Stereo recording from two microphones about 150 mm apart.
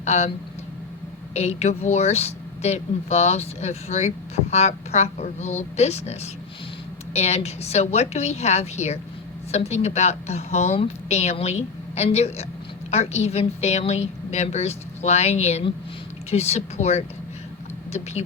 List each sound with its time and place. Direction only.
0.0 s speech: 50° left (ahead or behind)
1.3 s a woman's voice: 45° left (ahead or behind)